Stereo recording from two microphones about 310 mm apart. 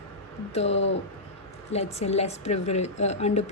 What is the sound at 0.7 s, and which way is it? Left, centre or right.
Speech, left.